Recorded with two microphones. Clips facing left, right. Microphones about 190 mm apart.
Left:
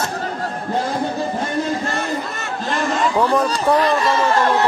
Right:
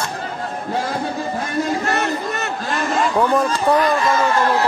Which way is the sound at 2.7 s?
Centre (ahead or behind).